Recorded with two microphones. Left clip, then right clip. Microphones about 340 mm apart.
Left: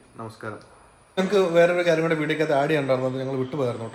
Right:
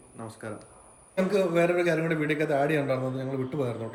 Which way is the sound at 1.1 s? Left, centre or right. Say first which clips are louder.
Left 5 dB; centre.